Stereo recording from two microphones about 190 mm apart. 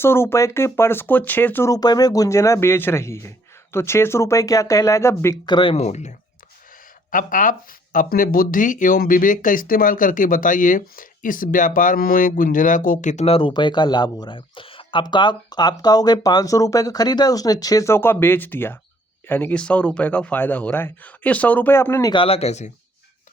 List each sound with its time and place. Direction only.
0.0 s speech: 10° left (ahead or behind)
22.1 s speech: 30° left (ahead or behind)